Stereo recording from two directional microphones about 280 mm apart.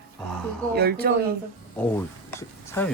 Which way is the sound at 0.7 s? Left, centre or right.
Right.